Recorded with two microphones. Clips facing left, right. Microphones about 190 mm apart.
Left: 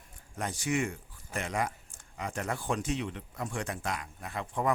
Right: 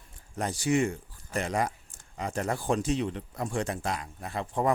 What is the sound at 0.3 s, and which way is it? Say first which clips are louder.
Speech: right 5 dB; 35° right (ahead or behind).